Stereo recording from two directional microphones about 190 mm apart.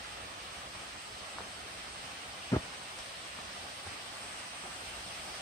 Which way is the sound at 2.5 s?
15° left (ahead or behind).